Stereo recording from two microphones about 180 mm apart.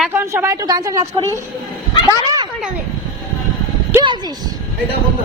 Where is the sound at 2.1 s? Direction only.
20° right (ahead or behind).